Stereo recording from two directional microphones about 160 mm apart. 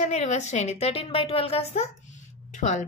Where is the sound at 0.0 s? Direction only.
45° left (ahead or behind).